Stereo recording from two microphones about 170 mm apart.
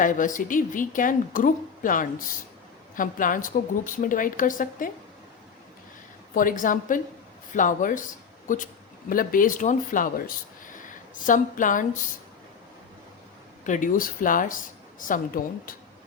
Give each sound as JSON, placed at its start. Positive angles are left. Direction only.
{"t": 0.0, "sound": "a woman's voice", "side_deg": 50}
{"t": 6.3, "sound": "a woman's voice", "side_deg": 50}
{"t": 13.7, "sound": "a woman's voice", "side_deg": 50}